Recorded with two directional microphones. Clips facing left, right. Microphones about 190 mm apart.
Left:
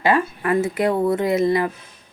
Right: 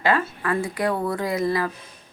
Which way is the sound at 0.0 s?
20° left (ahead or behind).